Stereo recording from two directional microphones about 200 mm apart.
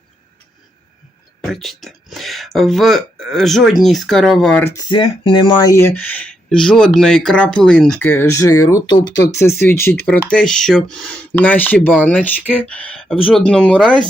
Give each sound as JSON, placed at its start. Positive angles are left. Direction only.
{"t": 1.4, "sound": "speech", "side_deg": 0}